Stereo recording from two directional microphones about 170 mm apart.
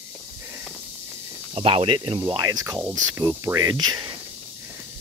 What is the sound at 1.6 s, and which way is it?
Speech, 35° right (ahead or behind).